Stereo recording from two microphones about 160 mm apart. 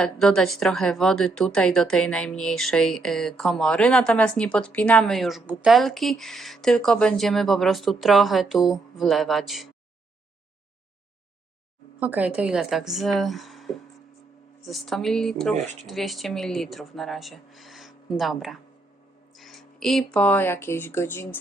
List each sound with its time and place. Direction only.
0.0 s speech: 5° left (ahead or behind)
11.9 s speech: 10° right (ahead or behind)
15.5 s speech: 45° right (ahead or behind)
15.9 s speech: centre (ahead or behind)